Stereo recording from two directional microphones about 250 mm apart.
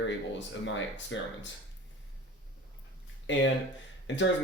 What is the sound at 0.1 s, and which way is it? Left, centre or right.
Speech, left.